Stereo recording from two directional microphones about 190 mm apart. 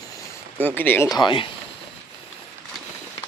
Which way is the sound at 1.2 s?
25° left (ahead or behind).